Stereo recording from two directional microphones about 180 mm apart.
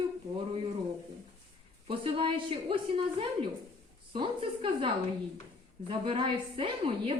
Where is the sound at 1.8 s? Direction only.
30° right (ahead or behind).